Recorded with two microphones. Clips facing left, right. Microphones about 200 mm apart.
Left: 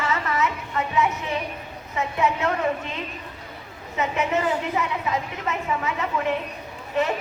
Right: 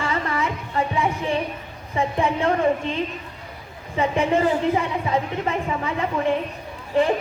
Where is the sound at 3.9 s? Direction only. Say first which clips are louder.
Right 4 dB; 30° right (ahead or behind).